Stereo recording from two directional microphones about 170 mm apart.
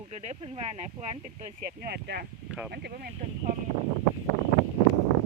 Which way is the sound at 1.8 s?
70° right (ahead or behind).